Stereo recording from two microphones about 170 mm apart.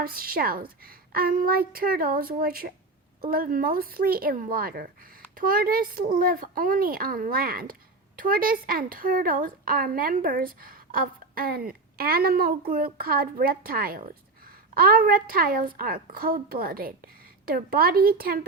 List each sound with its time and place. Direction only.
0.0 s speech: 60° right (ahead or behind)